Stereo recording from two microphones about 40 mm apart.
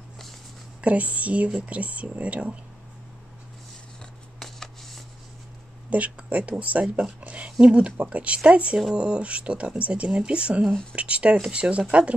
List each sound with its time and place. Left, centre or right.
0.7 s speech: right
4.4 s a sound: centre
5.9 s speech: right
10.7 s speech: centre
11.0 s speech: right